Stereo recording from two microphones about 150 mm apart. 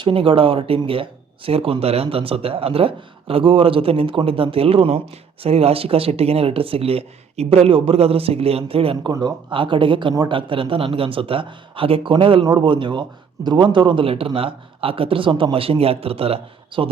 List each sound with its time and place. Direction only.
0.0 s speech: 35° right (ahead or behind)